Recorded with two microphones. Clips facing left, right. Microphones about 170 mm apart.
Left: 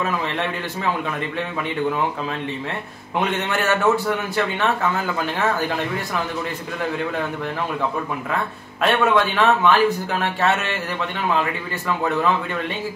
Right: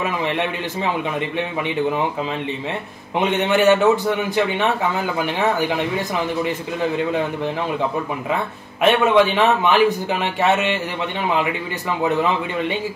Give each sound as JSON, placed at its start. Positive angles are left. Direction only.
{"t": 3.2, "sound": "a man's voice", "side_deg": -20}
{"t": 8.8, "sound": "a man's voice", "side_deg": -20}